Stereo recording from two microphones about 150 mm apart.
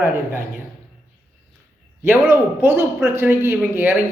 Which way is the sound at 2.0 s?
15° right (ahead or behind).